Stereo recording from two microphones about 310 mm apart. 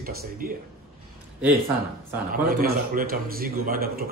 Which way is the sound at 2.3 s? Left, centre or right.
Right.